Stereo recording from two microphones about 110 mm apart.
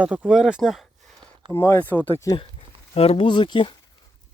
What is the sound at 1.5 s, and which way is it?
Speech, 25° left (ahead or behind).